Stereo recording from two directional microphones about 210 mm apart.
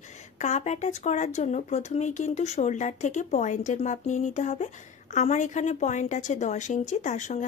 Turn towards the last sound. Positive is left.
turn(degrees=35)  # may be behind; listen again after turning